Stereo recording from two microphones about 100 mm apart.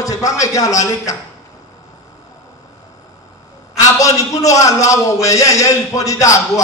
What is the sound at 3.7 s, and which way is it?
A man's voice, 35° left (ahead or behind).